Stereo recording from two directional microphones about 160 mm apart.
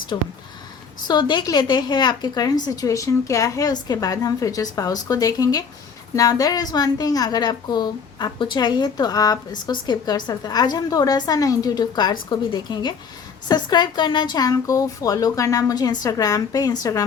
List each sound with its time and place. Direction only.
0.1 s a woman's voice: 25° left (ahead or behind)